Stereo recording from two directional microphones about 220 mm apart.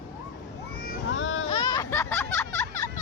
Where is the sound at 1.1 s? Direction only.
65° left (ahead or behind).